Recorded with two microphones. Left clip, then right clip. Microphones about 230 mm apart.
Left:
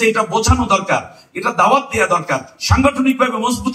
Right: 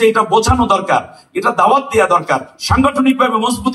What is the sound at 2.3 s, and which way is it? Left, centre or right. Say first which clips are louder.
Speech: right 3 dB; right.